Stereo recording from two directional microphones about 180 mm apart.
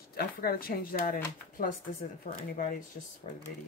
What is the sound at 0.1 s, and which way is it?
Speech, 60° left (ahead or behind).